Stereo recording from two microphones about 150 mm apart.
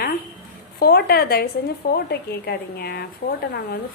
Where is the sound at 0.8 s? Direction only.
90° left.